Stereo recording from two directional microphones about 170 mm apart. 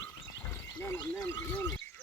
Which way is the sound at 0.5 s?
15° left (ahead or behind).